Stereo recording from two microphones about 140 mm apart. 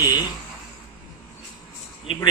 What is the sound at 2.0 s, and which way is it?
Speech, 40° left (ahead or behind).